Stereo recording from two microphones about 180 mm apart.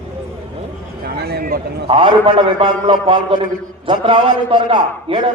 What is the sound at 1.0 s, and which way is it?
Speech, 60° right (ahead or behind).